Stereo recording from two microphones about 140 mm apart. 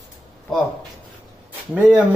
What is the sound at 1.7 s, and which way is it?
Speech, 15° right (ahead or behind).